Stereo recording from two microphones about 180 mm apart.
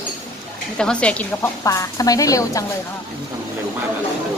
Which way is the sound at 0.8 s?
5° left (ahead or behind).